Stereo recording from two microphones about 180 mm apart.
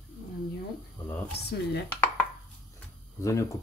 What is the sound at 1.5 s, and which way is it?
Dishes, 65° left (ahead or behind).